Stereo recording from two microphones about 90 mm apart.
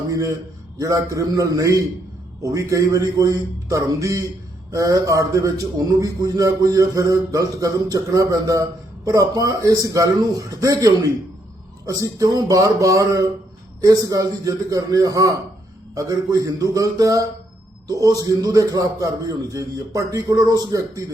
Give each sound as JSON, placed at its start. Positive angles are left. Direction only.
{"t": 0.1, "sound": "a man's voice", "side_deg": -40}